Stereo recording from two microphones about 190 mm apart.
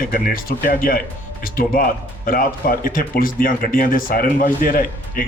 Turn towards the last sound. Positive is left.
turn(degrees=50)  # may be behind; listen again after turning